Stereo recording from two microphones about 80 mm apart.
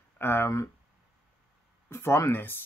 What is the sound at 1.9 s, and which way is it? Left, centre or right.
Speech, left.